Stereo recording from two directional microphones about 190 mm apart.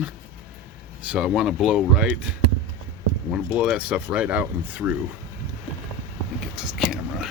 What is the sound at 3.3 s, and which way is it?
Speech, 5° right (ahead or behind).